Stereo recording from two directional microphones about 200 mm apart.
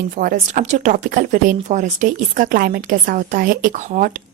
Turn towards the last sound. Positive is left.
turn(degrees=-40)  # may be behind; listen again after turning